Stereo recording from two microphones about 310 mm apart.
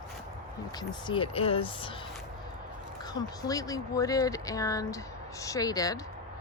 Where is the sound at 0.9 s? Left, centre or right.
Centre.